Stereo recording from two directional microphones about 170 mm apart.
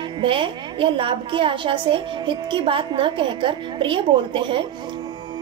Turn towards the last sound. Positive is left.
turn(degrees=-30)  # may be behind; listen again after turning